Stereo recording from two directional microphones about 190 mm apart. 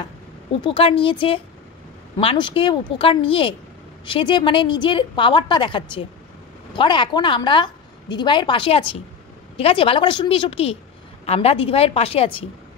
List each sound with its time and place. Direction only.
0.6 s a woman's voice: 30° left (ahead or behind)